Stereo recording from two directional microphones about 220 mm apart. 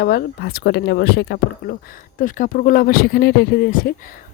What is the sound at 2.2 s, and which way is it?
Speech, 35° left (ahead or behind).